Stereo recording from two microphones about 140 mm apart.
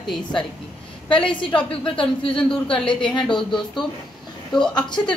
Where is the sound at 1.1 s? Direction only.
35° left (ahead or behind).